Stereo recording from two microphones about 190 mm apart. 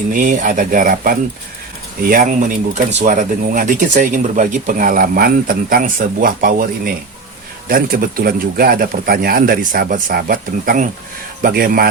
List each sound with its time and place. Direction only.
0.1 s speech: 45° right (ahead or behind)